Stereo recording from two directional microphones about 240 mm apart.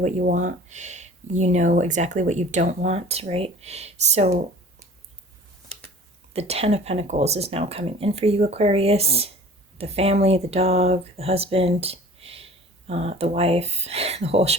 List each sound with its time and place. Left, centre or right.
0.0 s speech: right
6.3 s speech: right